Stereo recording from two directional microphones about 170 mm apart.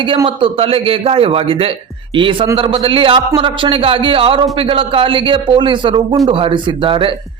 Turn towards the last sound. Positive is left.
turn(degrees=-30)  # may be behind; listen again after turning